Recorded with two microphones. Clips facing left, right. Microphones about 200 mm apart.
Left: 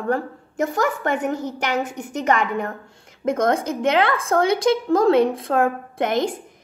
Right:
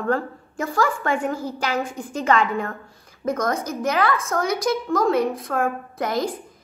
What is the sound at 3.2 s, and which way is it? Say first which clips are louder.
A woman's voice: left 4 dB; 25° left (ahead or behind).